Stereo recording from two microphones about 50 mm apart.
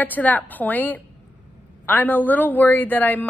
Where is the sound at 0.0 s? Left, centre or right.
Left.